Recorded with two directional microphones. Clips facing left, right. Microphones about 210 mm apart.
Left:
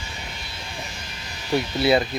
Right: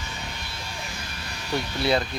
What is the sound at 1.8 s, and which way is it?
Speech, 5° left (ahead or behind).